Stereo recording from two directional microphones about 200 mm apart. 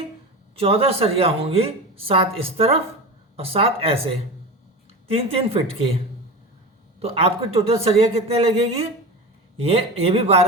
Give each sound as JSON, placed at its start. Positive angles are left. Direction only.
{"t": 0.5, "sound": "a woman's voice", "side_deg": -30}
{"t": 5.0, "sound": "a woman's voice", "side_deg": -30}
{"t": 7.0, "sound": "a woman's voice", "side_deg": -30}